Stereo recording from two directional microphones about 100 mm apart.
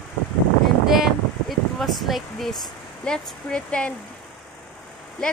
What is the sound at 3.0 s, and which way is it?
Speech, 10° left (ahead or behind).